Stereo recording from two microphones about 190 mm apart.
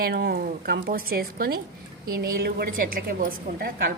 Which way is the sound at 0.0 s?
55° right (ahead or behind).